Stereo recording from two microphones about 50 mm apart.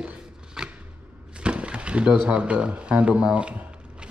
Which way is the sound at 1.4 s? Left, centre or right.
Right.